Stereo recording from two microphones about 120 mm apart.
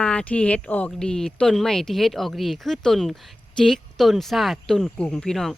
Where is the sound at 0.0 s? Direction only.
10° left (ahead or behind).